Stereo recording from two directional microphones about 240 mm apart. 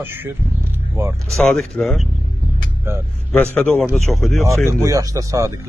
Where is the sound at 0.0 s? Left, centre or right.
Centre.